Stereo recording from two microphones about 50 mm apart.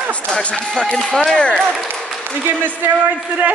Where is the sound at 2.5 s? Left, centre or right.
Right.